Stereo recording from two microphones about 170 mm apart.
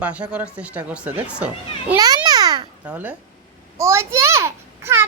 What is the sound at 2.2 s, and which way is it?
Babbling, 25° right (ahead or behind).